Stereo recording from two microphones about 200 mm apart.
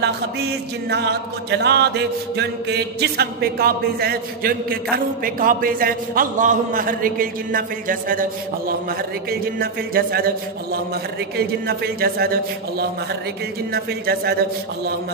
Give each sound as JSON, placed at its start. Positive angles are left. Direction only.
{"t": 0.8, "sound": "chant", "side_deg": -55}